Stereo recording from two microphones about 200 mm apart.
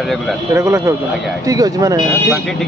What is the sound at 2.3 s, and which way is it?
Speech, centre (ahead or behind).